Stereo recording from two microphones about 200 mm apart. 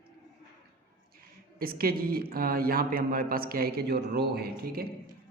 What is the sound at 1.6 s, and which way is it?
A man's voice, 45° right (ahead or behind).